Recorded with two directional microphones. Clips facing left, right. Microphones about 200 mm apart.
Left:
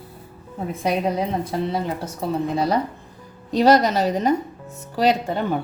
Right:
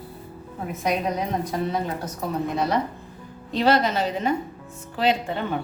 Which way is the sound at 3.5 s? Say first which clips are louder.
Left 4 dB; 40° left (ahead or behind).